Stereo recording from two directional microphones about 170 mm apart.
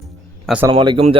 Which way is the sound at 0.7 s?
30° right (ahead or behind).